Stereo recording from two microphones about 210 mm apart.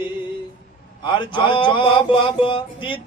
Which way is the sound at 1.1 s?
20° left (ahead or behind).